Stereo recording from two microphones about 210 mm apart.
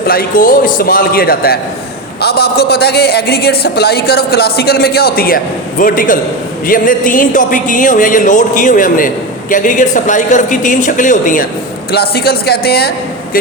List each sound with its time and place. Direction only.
0.1 s a man's voice: 40° left (ahead or behind)
11.9 s a man's voice: 50° left (ahead or behind)